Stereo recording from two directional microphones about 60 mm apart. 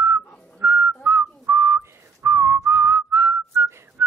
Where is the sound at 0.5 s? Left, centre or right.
Right.